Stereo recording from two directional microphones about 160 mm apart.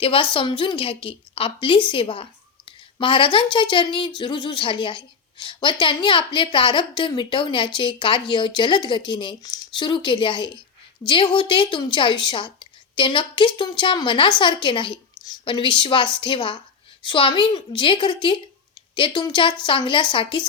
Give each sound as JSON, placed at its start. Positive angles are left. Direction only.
{"t": 0.0, "sound": "a woman's voice", "side_deg": 35}